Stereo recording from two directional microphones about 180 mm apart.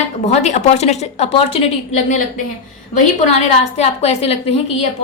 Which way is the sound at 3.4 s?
35° left (ahead or behind).